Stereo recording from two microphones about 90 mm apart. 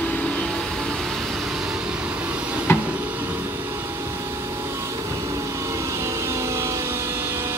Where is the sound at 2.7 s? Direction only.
25° left (ahead or behind).